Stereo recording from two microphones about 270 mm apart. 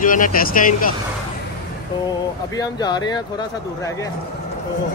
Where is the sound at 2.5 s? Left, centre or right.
Centre.